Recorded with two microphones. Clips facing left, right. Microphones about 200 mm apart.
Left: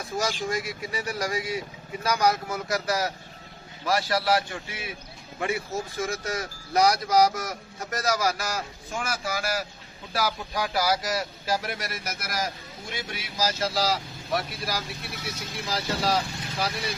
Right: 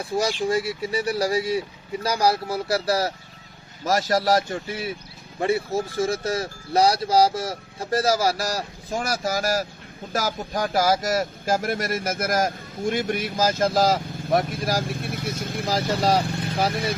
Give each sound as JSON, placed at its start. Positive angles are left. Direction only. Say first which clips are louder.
{"t": 0.0, "sound": "a man's voice", "louder": "right 5 dB", "side_deg": -30}